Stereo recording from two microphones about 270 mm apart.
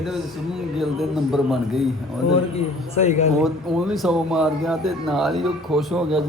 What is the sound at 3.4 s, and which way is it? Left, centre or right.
Speech, centre.